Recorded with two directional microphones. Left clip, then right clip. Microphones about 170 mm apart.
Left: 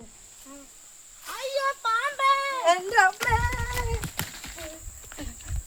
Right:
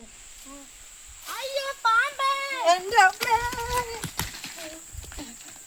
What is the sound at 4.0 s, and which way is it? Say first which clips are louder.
Cat: right 1 dB; 20° left (ahead or behind).